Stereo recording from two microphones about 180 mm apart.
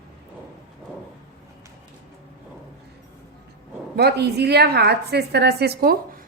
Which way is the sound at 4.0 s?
65° right (ahead or behind).